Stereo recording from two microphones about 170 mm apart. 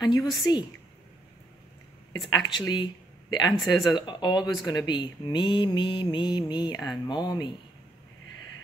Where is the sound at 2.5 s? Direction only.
25° left (ahead or behind).